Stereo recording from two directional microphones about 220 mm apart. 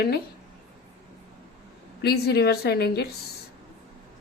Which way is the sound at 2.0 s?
45° left (ahead or behind).